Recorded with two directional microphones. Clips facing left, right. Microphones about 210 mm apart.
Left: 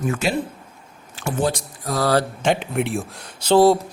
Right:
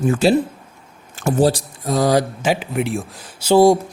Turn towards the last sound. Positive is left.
turn(degrees=-10)  # may be behind; listen again after turning